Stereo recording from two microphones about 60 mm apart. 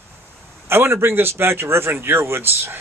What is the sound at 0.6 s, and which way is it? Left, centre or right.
A man's voice, right.